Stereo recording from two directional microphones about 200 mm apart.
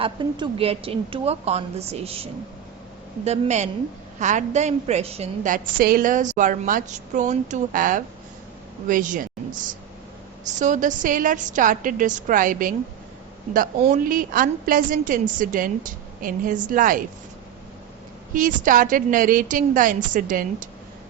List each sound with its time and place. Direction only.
0.0 s a woman's voice: 25° right (ahead or behind); by 9.2 s 40° right (ahead or behind)
10.6 s a woman's voice: 40° right (ahead or behind)
18.3 s a woman's voice: 40° right (ahead or behind)